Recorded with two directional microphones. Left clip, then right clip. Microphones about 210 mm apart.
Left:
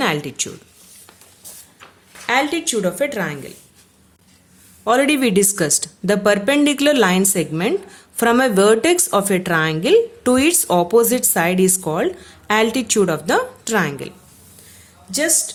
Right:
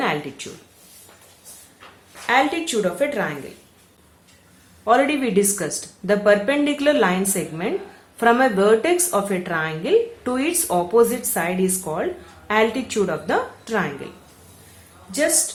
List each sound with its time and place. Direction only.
0.0 s speech: 50° left (ahead or behind)
2.2 s a woman's voice: 45° left (ahead or behind)
4.8 s a woman's voice: 50° left (ahead or behind)